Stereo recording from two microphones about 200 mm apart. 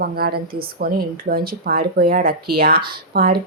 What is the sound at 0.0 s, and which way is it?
A woman's voice, 50° right (ahead or behind).